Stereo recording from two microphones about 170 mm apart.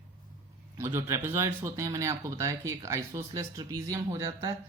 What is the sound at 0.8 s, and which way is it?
Speech, 15° right (ahead or behind).